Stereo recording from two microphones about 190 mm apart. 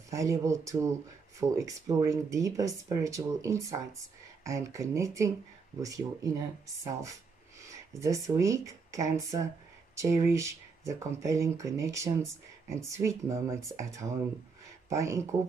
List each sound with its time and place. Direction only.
0.1 s speech: 15° right (ahead or behind)
8.0 s speech: 15° right (ahead or behind)